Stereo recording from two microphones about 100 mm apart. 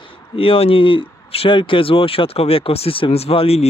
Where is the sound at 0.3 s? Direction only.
70° left (ahead or behind).